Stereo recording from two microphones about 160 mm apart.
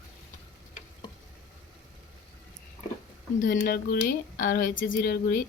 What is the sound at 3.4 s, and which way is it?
Speech, 65° left (ahead or behind).